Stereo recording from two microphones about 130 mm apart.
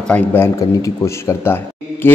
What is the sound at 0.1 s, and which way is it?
A man's voice, 15° left (ahead or behind).